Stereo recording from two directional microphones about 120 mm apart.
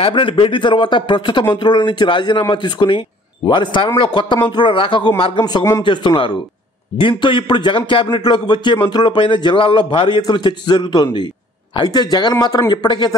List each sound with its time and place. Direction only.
0.0 s speech: 45° left (ahead or behind)
5.4 s speech: 30° left (ahead or behind)